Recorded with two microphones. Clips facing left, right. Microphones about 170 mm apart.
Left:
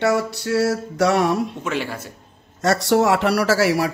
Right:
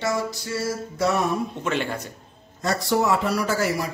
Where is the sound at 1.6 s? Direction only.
5° left (ahead or behind).